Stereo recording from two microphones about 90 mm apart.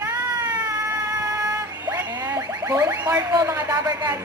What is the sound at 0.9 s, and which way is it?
Music, 35° right (ahead or behind).